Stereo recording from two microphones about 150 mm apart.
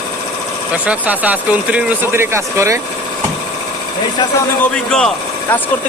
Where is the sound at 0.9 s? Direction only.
10° right (ahead or behind).